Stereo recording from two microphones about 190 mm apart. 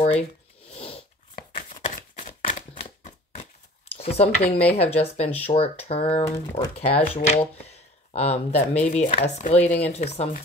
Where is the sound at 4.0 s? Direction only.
30° left (ahead or behind).